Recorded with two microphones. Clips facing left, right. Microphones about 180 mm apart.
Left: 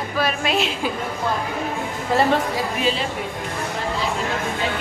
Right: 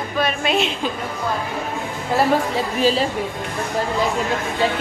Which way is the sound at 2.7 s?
35° right (ahead or behind).